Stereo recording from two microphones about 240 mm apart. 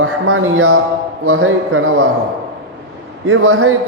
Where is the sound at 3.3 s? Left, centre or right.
Right.